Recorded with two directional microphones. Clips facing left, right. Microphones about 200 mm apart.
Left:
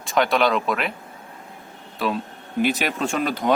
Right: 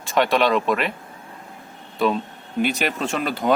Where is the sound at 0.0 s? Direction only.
Centre (ahead or behind).